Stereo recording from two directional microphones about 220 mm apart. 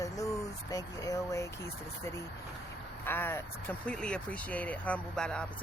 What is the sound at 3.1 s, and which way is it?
Speech, 10° left (ahead or behind).